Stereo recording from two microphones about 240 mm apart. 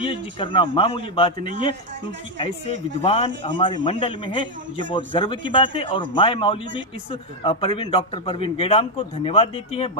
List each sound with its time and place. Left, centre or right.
0.0 s a man's voice: left